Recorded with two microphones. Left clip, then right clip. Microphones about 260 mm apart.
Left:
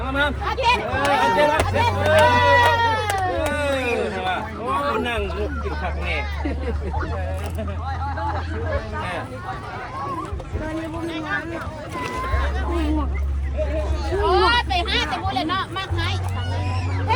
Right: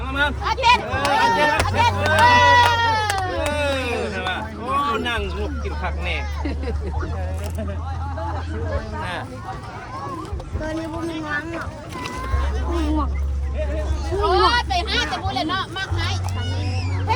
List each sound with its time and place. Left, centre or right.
0.0 s speech: centre
2.0 s a sound: centre
4.9 s speech: centre
10.7 s speech: right
14.2 s speech: right